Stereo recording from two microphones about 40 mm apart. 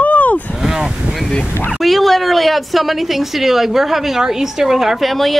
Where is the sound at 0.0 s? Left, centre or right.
Left.